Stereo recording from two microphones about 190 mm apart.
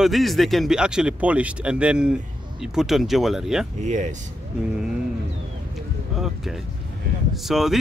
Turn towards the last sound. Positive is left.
turn(degrees=0)  # may be behind; listen again after turning